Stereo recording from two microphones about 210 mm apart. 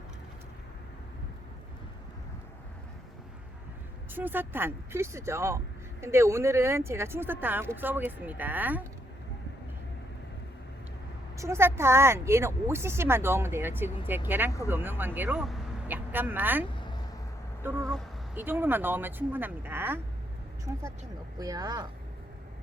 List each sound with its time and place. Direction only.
4.1 s speech: 10° right (ahead or behind)
11.3 s speech: 15° right (ahead or behind)
17.6 s a sound: 10° right (ahead or behind)
18.3 s speech: 10° right (ahead or behind)